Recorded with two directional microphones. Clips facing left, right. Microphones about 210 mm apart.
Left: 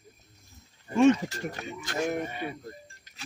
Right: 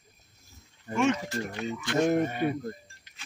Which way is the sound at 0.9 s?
35° left (ahead or behind).